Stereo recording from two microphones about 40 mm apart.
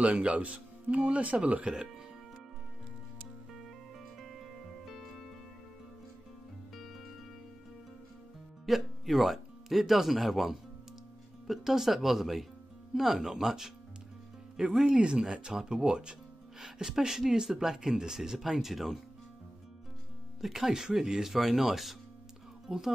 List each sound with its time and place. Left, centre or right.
0.0 s speech: right
4.8 s music: centre
6.7 s music: centre
8.6 s speech: centre
14.7 s speech: centre
15.0 s speech: right
18.4 s speech: centre
20.3 s speech: centre
22.7 s speech: centre